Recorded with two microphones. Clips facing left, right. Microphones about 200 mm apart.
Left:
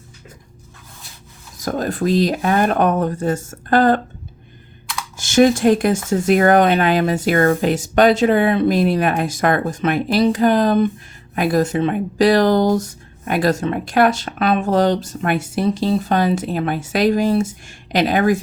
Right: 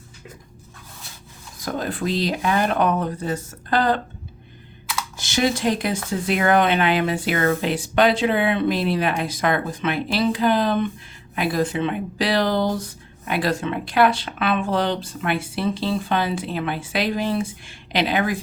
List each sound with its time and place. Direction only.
1.5 s speech: 45° left (ahead or behind)
5.1 s speech: 50° left (ahead or behind)